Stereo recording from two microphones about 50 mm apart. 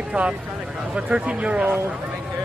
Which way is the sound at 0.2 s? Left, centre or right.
Right.